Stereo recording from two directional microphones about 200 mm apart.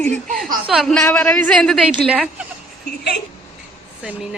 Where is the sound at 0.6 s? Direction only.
Centre (ahead or behind).